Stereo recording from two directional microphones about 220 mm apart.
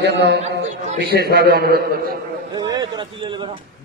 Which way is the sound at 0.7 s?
35° right (ahead or behind).